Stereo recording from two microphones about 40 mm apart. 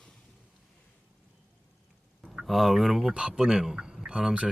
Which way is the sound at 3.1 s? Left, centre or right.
Centre.